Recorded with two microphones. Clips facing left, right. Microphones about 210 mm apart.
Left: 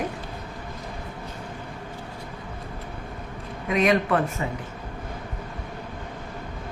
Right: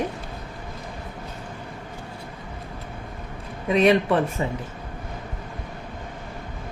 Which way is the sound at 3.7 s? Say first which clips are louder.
Right 3 dB; 30° right (ahead or behind).